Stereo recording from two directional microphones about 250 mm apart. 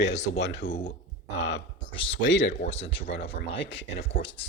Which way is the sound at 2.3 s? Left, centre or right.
Left.